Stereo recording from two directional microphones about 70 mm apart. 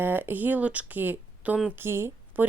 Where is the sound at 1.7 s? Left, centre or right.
Right.